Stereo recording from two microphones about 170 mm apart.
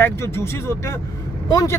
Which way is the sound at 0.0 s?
15° left (ahead or behind).